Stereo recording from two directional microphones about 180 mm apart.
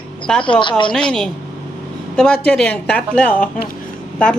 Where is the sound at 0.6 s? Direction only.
25° left (ahead or behind).